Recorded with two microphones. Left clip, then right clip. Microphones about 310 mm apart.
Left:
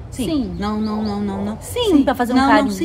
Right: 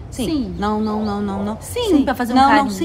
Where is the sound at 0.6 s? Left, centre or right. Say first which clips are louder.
Right 3 dB; centre.